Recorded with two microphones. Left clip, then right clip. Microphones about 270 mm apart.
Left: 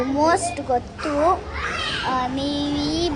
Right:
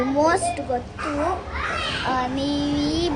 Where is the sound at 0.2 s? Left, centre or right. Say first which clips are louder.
Left 1 dB; centre.